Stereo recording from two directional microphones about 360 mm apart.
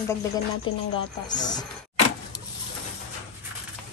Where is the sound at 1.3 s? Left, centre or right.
Centre.